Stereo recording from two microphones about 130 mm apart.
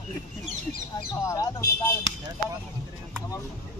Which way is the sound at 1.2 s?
25° left (ahead or behind).